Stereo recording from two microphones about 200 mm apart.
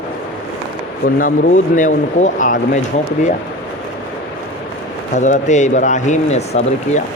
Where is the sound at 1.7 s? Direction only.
40° left (ahead or behind).